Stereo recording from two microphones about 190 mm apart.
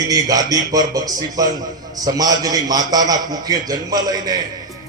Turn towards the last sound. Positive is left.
turn(degrees=-20)  # may be behind; listen again after turning